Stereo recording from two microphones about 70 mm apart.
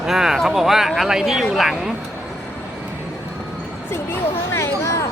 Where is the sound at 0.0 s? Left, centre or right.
Centre.